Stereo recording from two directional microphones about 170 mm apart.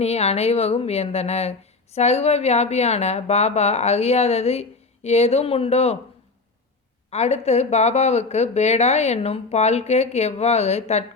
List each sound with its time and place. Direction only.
0.0 s speech: 40° left (ahead or behind)
7.1 s speech: 40° left (ahead or behind)